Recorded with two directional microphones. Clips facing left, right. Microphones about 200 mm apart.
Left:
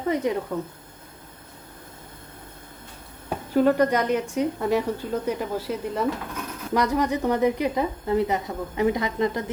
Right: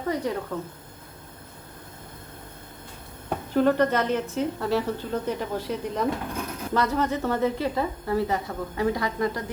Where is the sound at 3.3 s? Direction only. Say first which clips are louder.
Left 2 dB; 10° left (ahead or behind).